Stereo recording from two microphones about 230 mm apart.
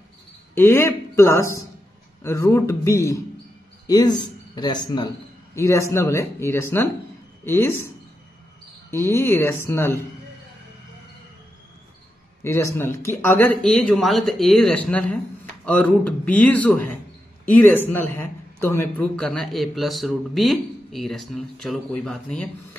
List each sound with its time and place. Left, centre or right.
0.6 s a man's voice: centre
8.9 s a man's voice: centre
12.4 s a man's voice: centre